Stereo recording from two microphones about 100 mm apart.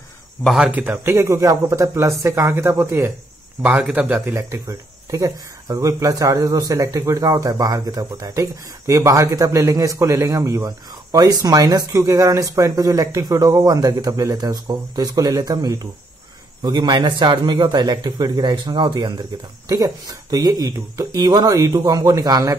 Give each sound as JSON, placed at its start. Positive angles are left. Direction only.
{"t": 0.7, "sound": "a man's voice", "side_deg": -20}